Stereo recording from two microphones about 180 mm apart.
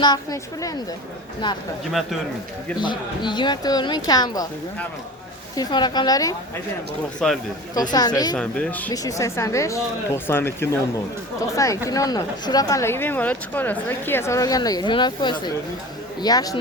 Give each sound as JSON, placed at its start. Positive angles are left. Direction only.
{"t": 0.0, "sound": "speech", "side_deg": 20}
{"t": 1.9, "sound": "speech", "side_deg": 0}
{"t": 2.8, "sound": "speech", "side_deg": 25}
{"t": 5.5, "sound": "speech", "side_deg": 25}
{"t": 7.2, "sound": "speech", "side_deg": 5}
{"t": 7.8, "sound": "speech", "side_deg": 20}
{"t": 8.4, "sound": "speech", "side_deg": 5}
{"t": 8.9, "sound": "speech", "side_deg": 20}